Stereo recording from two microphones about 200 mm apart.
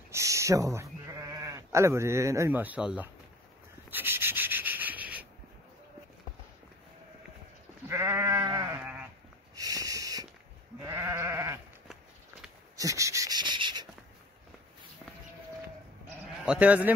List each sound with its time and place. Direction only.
0.1 s speech: 15° right (ahead or behind)
3.9 s rub: 10° right (ahead or behind)
7.9 s sheep: 10° right (ahead or behind)
9.6 s a sound: 15° right (ahead or behind)
10.9 s goat: 15° right (ahead or behind)
12.7 s a sound: 15° right (ahead or behind)
16.4 s speech: 5° right (ahead or behind)